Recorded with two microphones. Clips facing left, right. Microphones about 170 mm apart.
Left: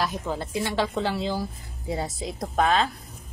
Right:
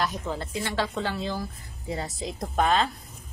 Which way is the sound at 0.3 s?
10° left (ahead or behind).